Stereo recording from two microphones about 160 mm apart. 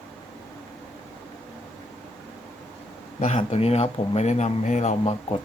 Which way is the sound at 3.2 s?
40° left (ahead or behind).